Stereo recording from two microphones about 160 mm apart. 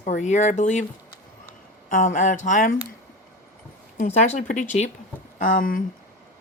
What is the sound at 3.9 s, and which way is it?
Speech, 50° left (ahead or behind).